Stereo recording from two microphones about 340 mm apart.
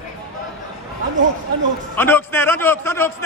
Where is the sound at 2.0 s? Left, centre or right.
Centre.